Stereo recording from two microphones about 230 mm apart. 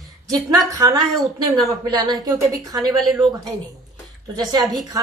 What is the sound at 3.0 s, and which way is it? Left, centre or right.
Speech, centre.